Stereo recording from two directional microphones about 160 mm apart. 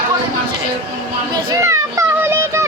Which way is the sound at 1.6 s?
20° right (ahead or behind).